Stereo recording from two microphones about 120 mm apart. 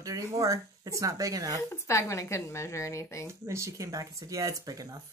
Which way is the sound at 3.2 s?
25° right (ahead or behind).